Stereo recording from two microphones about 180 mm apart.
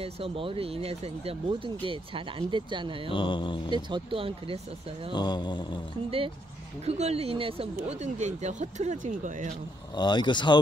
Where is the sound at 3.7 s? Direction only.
25° right (ahead or behind).